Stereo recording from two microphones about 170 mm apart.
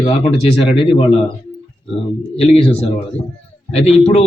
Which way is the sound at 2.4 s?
35° left (ahead or behind).